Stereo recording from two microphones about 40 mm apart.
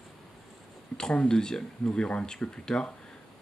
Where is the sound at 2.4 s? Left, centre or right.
Left.